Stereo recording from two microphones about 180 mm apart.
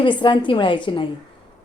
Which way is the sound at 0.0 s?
25° left (ahead or behind).